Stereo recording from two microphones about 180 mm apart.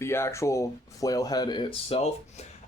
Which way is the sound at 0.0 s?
15° left (ahead or behind).